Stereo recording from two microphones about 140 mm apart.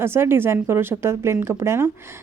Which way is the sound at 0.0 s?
15° right (ahead or behind).